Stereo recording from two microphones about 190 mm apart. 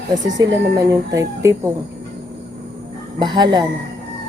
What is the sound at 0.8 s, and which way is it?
Speech, 15° right (ahead or behind).